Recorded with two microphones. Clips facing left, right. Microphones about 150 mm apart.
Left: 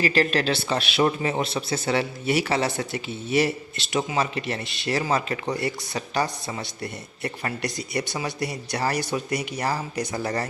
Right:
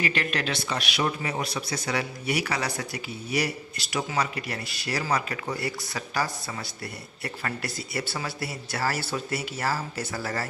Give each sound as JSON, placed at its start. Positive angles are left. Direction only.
{"t": 0.0, "sound": "a man's voice", "side_deg": 35}